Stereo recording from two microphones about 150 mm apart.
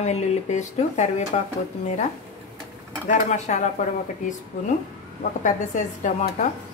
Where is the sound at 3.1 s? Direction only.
50° left (ahead or behind).